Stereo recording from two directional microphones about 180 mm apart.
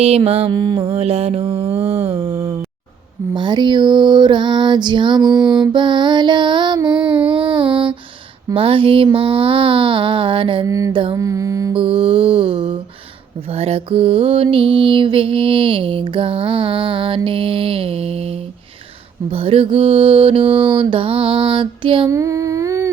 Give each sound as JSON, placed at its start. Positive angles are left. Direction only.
{"t": 0.3, "sound": "mantra", "side_deg": -30}
{"t": 0.9, "sound": "mantra", "side_deg": -35}
{"t": 1.5, "sound": "mantra", "side_deg": -15}
{"t": 2.0, "sound": "mantra", "side_deg": -30}
{"t": 10.7, "sound": "mantra", "side_deg": -20}
{"t": 11.7, "sound": "mantra", "side_deg": -30}
{"t": 22.1, "sound": "humming", "side_deg": -15}